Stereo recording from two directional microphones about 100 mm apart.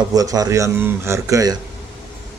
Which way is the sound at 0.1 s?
40° right (ahead or behind).